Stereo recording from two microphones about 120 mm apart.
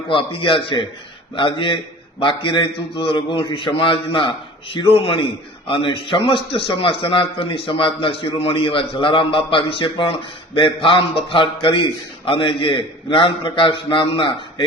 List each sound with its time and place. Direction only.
0.1 s a man's voice: 45° left (ahead or behind)